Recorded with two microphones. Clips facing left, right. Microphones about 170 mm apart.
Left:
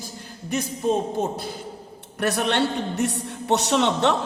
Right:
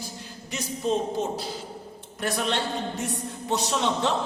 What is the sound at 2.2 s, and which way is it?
A man's voice, 65° left (ahead or behind).